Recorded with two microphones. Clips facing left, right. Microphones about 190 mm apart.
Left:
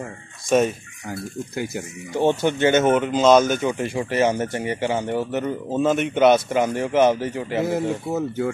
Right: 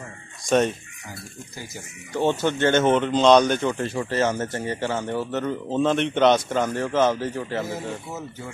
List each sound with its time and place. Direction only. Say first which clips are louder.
0.5 s speech: left 2 dB; 5° left (ahead or behind)
1.5 s speech: left 13 dB; 60° left (ahead or behind)
2.1 s speech: left 2 dB; 15° left (ahead or behind)
7.6 s speech: left 8 dB; 60° left (ahead or behind)